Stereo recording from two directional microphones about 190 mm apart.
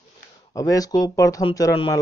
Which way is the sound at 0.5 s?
20° left (ahead or behind).